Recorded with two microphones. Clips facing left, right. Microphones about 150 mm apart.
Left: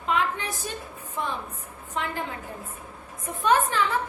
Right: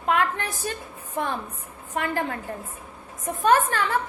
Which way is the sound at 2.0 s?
60° right (ahead or behind).